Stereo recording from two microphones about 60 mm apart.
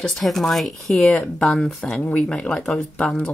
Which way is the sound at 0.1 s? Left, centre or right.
Centre.